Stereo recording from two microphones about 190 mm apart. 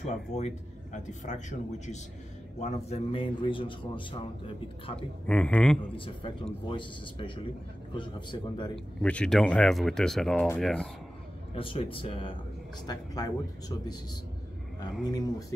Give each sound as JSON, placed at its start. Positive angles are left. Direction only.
{"t": 0.0, "sound": "a man's voice", "side_deg": 35}
{"t": 2.6, "sound": "a man's voice", "side_deg": 30}
{"t": 4.9, "sound": "speech", "side_deg": 5}
{"t": 5.8, "sound": "a man's voice", "side_deg": 25}
{"t": 8.7, "sound": "speech", "side_deg": 5}
{"t": 11.5, "sound": "a man's voice", "side_deg": 30}